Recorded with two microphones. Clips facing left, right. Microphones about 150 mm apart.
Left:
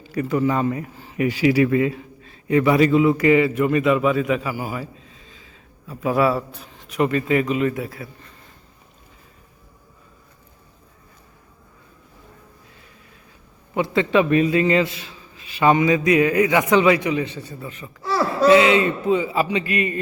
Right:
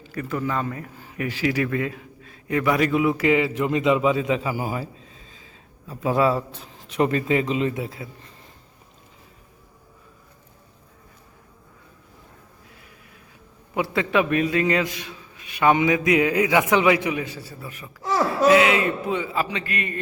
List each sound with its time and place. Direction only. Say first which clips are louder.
0.1 s a man's voice: left 6 dB; 10° left (ahead or behind); by 8.1 s 20° right (ahead or behind)
13.7 s a man's voice: left 3 dB; 5° right (ahead or behind)
15.6 s a man's voice: left 2 dB; 10° right (ahead or behind)
18.0 s a sound: left 1 dB; 15° right (ahead or behind)
18.4 s a man's voice: left 3 dB; 5° right (ahead or behind)